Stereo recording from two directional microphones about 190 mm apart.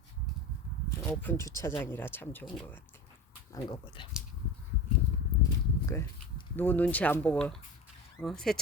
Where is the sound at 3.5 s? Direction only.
20° left (ahead or behind).